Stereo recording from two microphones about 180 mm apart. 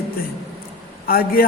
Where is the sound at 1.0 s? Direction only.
55° left (ahead or behind).